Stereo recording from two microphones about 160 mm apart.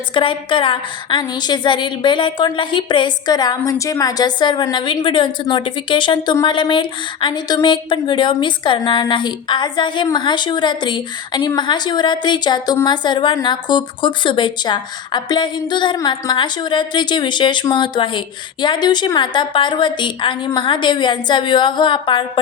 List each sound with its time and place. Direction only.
0.1 s a woman's voice: 30° left (ahead or behind)